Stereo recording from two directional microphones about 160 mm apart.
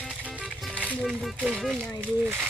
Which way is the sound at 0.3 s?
5° right (ahead or behind).